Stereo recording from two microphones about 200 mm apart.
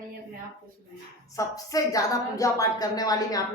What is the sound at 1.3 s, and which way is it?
A woman's voice, 15° left (ahead or behind).